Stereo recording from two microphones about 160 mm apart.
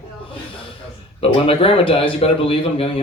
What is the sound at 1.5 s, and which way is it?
A man's voice, 35° left (ahead or behind).